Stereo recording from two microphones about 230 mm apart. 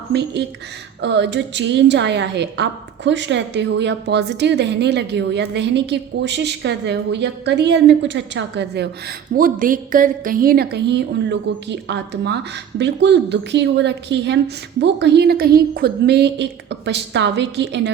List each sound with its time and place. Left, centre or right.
0.1 s a woman's voice: right